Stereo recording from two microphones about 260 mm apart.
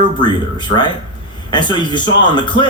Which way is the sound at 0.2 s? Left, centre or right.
Centre.